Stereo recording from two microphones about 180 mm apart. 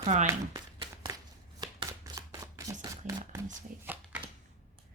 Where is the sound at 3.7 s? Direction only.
50° right (ahead or behind).